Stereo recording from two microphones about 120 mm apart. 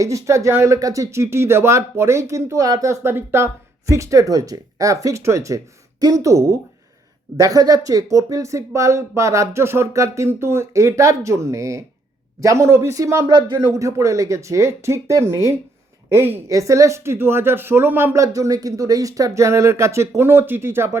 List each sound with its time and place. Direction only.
0.0 s speech: 25° right (ahead or behind)